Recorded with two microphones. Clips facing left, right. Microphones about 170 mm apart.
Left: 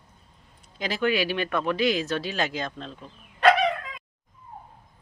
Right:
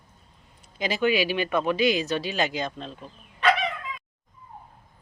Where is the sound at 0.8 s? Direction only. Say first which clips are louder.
Right 1 dB; centre (ahead or behind).